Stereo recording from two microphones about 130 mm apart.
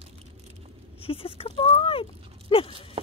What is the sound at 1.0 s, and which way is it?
Speech, 45° left (ahead or behind).